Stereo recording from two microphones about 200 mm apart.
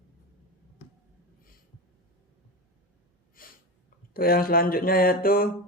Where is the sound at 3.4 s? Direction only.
45° left (ahead or behind).